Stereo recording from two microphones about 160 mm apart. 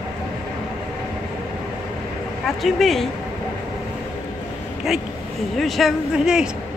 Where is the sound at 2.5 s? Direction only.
Centre (ahead or behind).